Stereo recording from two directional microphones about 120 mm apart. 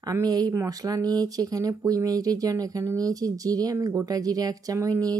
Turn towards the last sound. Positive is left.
turn(degrees=-30)  # may be behind; listen again after turning